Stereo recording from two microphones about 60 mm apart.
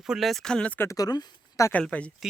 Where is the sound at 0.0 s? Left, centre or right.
Centre.